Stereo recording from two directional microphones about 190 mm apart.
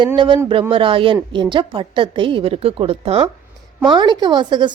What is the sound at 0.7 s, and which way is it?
A woman's voice, 30° right (ahead or behind).